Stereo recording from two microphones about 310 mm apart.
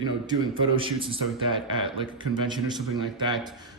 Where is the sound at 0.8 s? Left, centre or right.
Centre.